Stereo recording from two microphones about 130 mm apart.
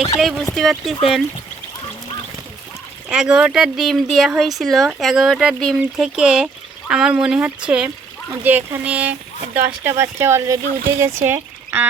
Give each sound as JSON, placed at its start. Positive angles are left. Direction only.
{"t": 0.2, "sound": "speech", "side_deg": 0}
{"t": 3.1, "sound": "speech", "side_deg": -5}